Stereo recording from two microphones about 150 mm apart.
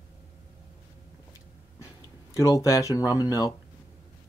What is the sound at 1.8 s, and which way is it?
Speech, 20° left (ahead or behind).